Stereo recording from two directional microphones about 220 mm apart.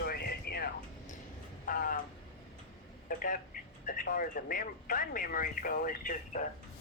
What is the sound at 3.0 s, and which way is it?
Speech, 40° left (ahead or behind).